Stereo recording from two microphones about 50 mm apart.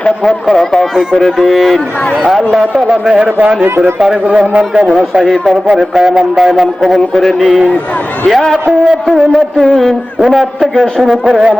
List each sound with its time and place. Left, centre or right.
0.3 s a man's voice: centre
2.5 s a man's voice: centre
3.2 s a man's voice: right
3.6 s speech: right
4.3 s a man's voice: right
5.2 s a man's voice: centre
5.6 s a man's voice: centre